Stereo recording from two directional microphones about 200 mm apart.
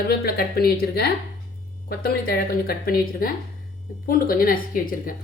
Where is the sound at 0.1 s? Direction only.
50° left (ahead or behind).